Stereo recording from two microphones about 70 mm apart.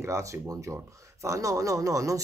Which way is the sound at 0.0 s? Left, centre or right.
Right.